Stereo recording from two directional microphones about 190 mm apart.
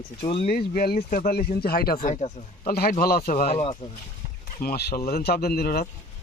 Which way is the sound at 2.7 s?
55° left (ahead or behind).